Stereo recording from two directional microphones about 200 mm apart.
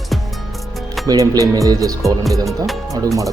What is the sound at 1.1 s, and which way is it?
Speech, 20° right (ahead or behind).